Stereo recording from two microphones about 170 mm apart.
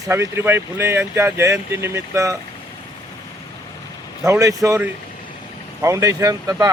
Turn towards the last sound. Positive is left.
turn(degrees=-20)  # may be behind; listen again after turning